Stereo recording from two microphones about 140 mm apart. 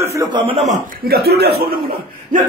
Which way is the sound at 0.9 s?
90° right.